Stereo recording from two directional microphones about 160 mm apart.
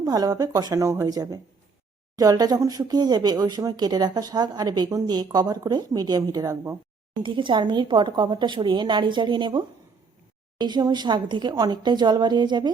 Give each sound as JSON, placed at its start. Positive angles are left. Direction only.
{"t": 0.0, "sound": "speech", "side_deg": -25}